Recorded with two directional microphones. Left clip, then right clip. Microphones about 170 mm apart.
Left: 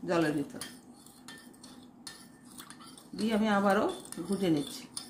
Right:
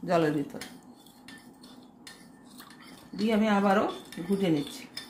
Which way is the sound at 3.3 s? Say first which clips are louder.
Right 3 dB; 30° right (ahead or behind).